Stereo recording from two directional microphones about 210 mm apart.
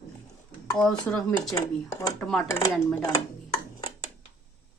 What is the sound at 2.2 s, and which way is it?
Speech, 5° left (ahead or behind).